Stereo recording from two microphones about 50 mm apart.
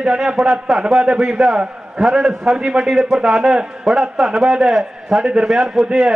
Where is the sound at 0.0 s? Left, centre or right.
Centre.